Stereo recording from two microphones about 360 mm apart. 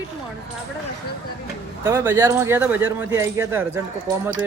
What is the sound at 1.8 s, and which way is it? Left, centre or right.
Speech, centre.